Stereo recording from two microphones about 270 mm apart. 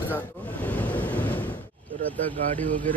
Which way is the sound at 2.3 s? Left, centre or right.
Right.